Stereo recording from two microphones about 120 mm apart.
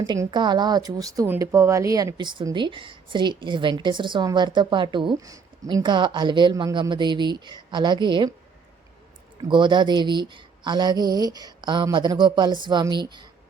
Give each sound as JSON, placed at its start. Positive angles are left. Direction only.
{"t": 0.3, "sound": "a woman's voice", "side_deg": -40}
{"t": 5.2, "sound": "a woman's voice", "side_deg": -30}
{"t": 9.5, "sound": "a woman's voice", "side_deg": -40}